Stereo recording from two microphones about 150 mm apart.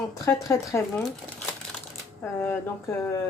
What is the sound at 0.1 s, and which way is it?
Speech, 20° left (ahead or behind).